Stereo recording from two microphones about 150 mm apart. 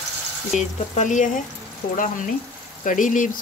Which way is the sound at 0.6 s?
55° left (ahead or behind).